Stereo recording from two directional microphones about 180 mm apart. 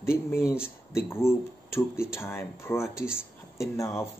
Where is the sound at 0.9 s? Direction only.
15° left (ahead or behind).